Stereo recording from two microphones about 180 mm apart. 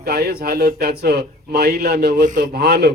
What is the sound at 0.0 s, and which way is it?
A man's voice, 65° right (ahead or behind).